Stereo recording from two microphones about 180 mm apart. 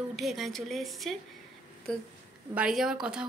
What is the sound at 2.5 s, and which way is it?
Speech, 5° right (ahead or behind).